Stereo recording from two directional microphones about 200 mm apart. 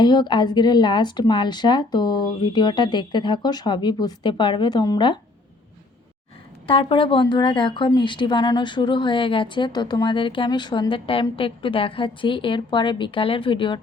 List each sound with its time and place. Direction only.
0.0 s a woman's voice: 20° left (ahead or behind)
6.7 s a woman's voice: 25° left (ahead or behind)